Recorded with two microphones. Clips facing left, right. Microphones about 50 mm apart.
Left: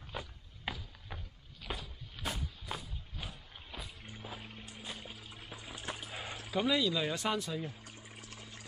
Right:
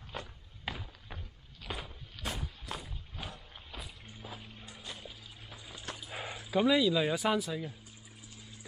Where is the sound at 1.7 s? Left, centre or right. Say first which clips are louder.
Right 1 dB; centre.